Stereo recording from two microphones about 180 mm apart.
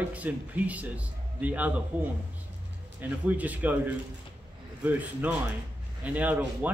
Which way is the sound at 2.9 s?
10° right (ahead or behind).